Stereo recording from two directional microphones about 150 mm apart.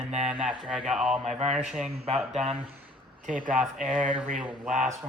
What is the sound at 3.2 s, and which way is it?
Speech, 65° right (ahead or behind).